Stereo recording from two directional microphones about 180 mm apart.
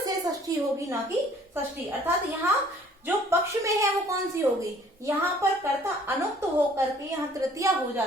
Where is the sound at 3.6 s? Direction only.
15° right (ahead or behind).